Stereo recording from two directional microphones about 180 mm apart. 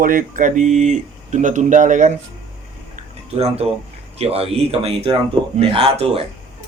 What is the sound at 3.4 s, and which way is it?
Speech, 35° right (ahead or behind).